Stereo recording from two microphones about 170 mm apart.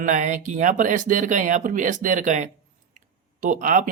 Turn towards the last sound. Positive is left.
turn(degrees=-50)  # may be behind; listen again after turning